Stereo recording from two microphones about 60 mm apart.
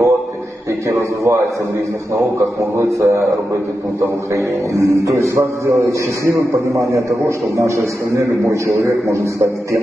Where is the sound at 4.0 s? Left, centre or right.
Right.